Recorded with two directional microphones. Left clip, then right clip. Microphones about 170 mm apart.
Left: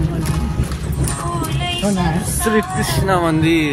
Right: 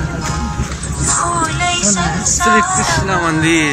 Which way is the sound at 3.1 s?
20° left (ahead or behind).